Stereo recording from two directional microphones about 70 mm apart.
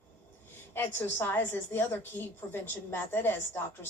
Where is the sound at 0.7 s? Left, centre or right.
Left.